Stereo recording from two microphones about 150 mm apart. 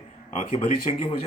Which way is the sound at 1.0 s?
40° left (ahead or behind).